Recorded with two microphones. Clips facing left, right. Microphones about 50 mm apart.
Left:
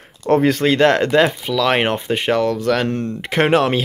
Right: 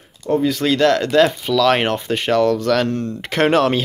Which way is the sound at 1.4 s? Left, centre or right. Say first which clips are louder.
Right 1 dB; centre.